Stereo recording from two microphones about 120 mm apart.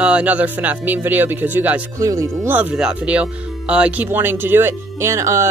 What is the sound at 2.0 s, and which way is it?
Speech, 30° right (ahead or behind).